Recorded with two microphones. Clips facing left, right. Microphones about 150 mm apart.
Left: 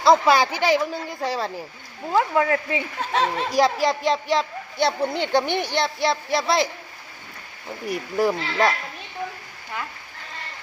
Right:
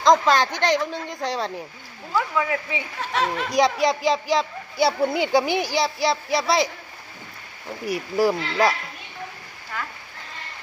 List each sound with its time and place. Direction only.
0.0 s a woman's voice: 10° left (ahead or behind)
2.1 s speech: 45° left (ahead or behind)
3.0 s speech: 35° left (ahead or behind)
3.5 s a woman's voice: centre (ahead or behind)
7.9 s a woman's voice: centre (ahead or behind)